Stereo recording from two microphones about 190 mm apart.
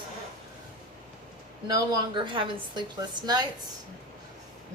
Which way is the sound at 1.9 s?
25° right (ahead or behind).